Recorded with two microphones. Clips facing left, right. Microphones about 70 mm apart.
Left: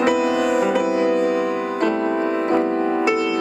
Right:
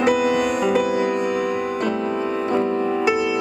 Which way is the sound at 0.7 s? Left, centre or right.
Left.